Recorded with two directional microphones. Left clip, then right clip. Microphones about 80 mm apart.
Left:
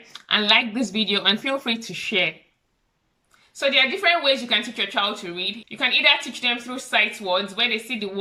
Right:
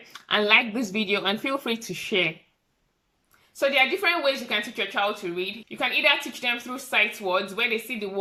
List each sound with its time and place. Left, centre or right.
0.1 s a woman's voice: centre; by 2.2 s right
3.6 s a woman's voice: right